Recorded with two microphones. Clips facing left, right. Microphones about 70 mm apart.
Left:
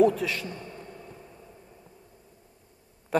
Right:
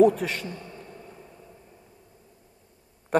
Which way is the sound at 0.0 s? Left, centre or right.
Right.